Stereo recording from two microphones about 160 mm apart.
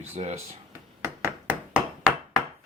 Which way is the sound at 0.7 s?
15° right (ahead or behind).